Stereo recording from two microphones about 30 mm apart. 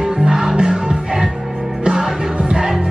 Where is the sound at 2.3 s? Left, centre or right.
Right.